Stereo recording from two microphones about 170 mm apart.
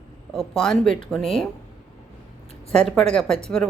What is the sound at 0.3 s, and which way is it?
Speech, centre (ahead or behind).